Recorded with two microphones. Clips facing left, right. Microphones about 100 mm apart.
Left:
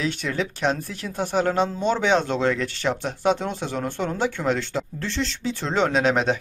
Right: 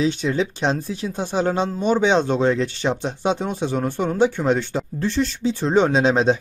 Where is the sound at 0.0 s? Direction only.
20° right (ahead or behind).